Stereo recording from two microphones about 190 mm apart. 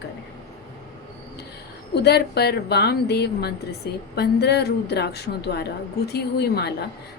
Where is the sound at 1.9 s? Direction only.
60° left (ahead or behind).